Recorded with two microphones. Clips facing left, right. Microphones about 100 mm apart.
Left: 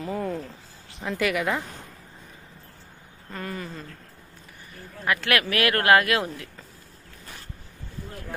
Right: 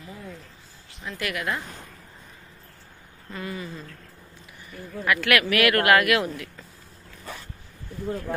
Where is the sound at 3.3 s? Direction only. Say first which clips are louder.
Even; 45° left (ahead or behind).